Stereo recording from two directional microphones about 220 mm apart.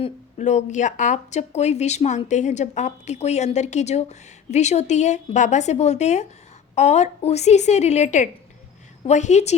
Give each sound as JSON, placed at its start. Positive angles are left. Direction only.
{"t": 0.0, "sound": "speech", "side_deg": 30}